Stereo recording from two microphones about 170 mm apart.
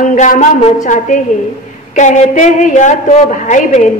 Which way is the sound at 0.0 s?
50° left (ahead or behind).